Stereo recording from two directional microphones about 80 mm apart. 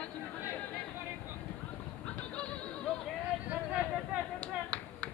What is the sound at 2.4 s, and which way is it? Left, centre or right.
Music, centre.